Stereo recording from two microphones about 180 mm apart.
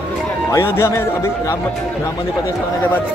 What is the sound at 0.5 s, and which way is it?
Speech, 15° left (ahead or behind).